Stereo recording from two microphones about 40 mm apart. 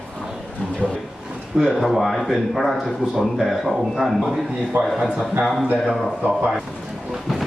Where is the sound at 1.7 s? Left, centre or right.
Centre.